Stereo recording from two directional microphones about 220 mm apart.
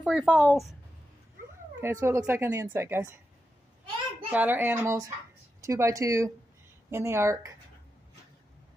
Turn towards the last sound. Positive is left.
turn(degrees=-10)  # may be behind; listen again after turning